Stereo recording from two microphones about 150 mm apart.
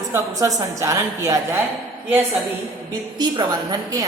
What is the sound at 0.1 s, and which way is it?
A woman's voice, 25° right (ahead or behind).